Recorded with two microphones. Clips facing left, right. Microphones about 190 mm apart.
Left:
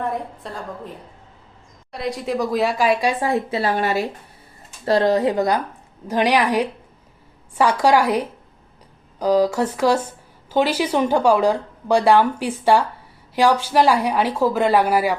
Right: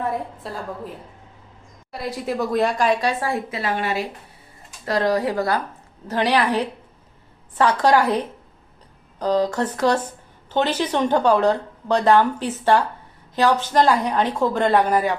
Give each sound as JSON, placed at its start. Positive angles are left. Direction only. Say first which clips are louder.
{"t": 0.0, "sound": "speech", "louder": "even", "side_deg": -5}
{"t": 1.9, "sound": "speech", "louder": "left 2 dB", "side_deg": 0}
{"t": 3.6, "sound": "speech", "louder": "left 3 dB", "side_deg": 35}
{"t": 4.9, "sound": "a woman's voice", "louder": "left 4 dB", "side_deg": 25}